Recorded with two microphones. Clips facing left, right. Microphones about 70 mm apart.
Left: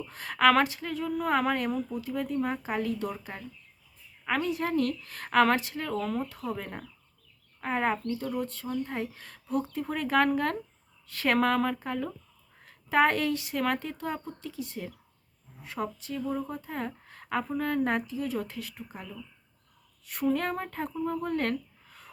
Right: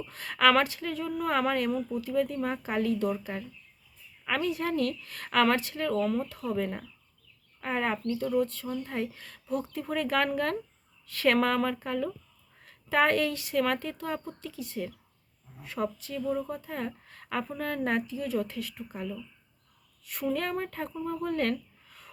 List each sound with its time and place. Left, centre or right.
0.1 s speech: left
4.3 s speech: left
20.3 s speech: left
21.0 s a sound: centre